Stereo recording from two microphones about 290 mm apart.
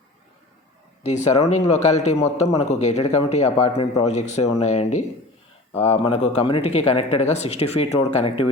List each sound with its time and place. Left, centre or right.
1.0 s a man's voice: left